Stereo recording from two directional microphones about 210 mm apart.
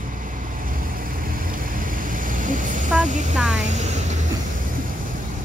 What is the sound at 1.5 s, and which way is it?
Vehicle, 40° right (ahead or behind).